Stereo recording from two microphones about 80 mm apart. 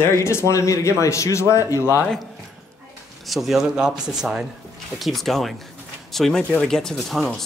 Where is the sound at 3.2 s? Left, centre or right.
Centre.